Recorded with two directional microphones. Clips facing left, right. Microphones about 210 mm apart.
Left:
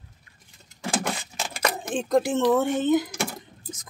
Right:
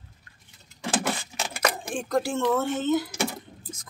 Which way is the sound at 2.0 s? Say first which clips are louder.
Left 6 dB; 20° left (ahead or behind).